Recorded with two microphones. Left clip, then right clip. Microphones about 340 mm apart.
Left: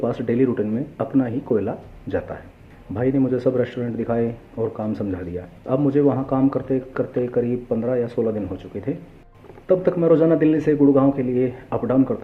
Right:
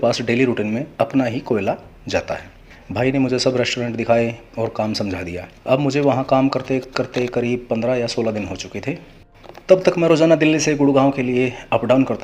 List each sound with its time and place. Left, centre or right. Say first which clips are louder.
0.0 s speech: right 4 dB; right